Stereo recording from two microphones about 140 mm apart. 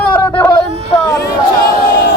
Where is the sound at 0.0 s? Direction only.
15° left (ahead or behind).